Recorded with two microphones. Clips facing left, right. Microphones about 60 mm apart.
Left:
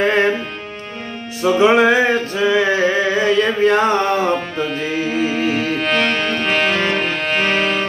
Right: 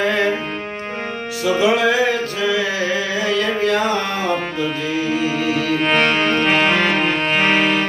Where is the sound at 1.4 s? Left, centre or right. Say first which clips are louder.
Left 4 dB; left.